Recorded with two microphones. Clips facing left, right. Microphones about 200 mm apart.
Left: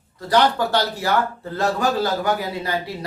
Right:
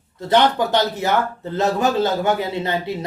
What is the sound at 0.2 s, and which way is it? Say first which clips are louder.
A man's voice: right 2 dB; 20° right (ahead or behind).